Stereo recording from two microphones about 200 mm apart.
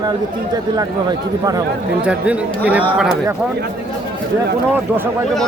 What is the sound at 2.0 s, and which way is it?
Speech, 5° right (ahead or behind).